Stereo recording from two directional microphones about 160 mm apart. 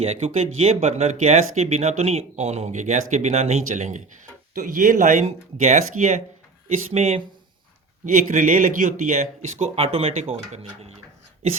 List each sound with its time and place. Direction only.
0.0 s speech: 40° right (ahead or behind)
8.0 s speech: 50° right (ahead or behind)